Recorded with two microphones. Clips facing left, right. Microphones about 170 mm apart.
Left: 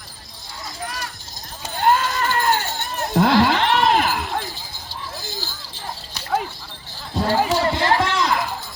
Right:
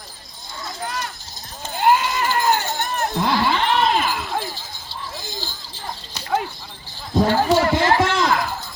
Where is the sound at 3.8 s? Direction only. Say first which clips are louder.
Left 2 dB; 55° left (ahead or behind).